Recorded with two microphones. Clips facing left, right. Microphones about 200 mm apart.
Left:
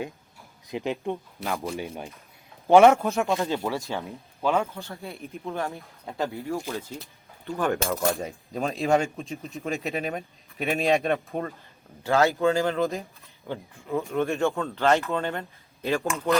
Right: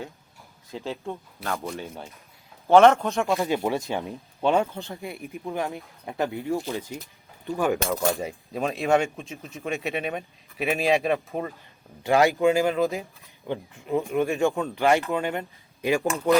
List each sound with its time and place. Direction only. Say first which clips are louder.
0.7 s a man's voice: left 4 dB; 15° left (ahead or behind)
1.5 s speech: left 2 dB; centre (ahead or behind)
2.6 s a man's voice: even; 15° left (ahead or behind)
3.3 s speech: right 2 dB; 15° right (ahead or behind)
7.7 s speech: left 1 dB; centre (ahead or behind)
12.0 s speech: right 2 dB; 15° right (ahead or behind)